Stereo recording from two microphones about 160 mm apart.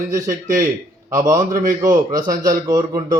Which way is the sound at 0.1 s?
20° right (ahead or behind).